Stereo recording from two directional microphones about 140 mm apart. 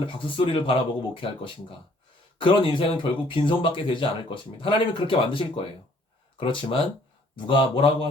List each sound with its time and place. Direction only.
0.5 s speech: 40° left (ahead or behind)
2.4 s speech: 40° left (ahead or behind)